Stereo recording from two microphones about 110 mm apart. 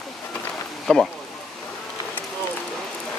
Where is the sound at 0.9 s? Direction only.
5° left (ahead or behind).